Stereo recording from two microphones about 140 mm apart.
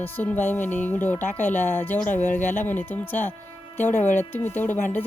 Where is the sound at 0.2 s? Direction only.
15° left (ahead or behind).